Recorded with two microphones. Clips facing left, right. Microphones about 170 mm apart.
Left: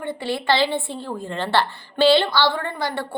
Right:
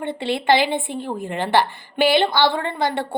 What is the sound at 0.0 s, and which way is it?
A woman's voice, 20° right (ahead or behind).